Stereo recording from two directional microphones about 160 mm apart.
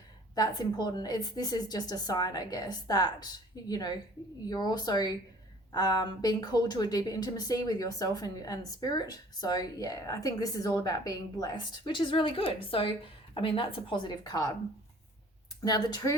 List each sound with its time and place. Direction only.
0.3 s a woman's voice: 25° left (ahead or behind)
15.6 s a woman's voice: 25° left (ahead or behind)